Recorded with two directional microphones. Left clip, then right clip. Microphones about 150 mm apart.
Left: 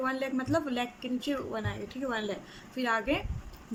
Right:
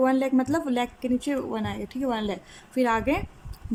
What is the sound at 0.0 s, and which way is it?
A woman's voice, 50° right (ahead or behind).